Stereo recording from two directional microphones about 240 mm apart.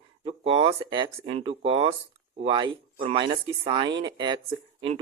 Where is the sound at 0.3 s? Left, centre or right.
Right.